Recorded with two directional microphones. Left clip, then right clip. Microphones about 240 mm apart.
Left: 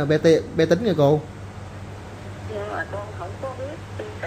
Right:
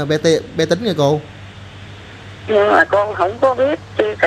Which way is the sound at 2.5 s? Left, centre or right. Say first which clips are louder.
Right 18 dB; right.